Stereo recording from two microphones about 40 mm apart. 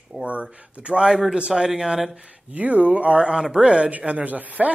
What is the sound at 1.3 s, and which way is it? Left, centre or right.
Speech, right.